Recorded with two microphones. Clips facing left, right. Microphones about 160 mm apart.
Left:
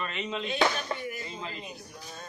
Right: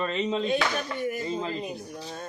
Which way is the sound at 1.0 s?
45° right (ahead or behind).